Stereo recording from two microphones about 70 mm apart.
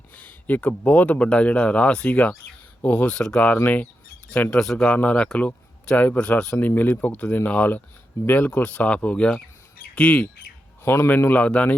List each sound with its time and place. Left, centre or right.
0.2 s speech: left
4.5 s speech: centre
4.9 s speech: centre
6.6 s speech: left
10.8 s speech: left; by 11.7 s centre